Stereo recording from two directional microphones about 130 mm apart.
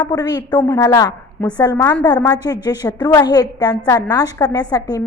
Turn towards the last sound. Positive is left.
turn(degrees=30)  # may be behind; listen again after turning